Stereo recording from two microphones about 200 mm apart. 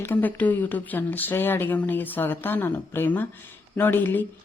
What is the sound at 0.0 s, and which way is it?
A woman's voice, 10° left (ahead or behind).